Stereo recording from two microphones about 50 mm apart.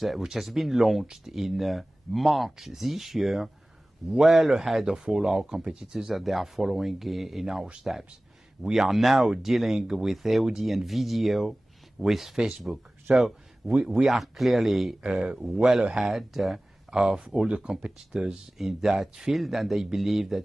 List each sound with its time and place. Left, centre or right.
0.2 s speech: centre
5.6 s speech: right
5.9 s speech: centre
14.1 s speech: centre
15.0 s speech: centre